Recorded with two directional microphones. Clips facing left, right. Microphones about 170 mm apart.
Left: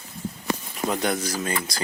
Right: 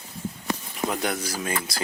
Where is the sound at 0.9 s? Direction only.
5° right (ahead or behind).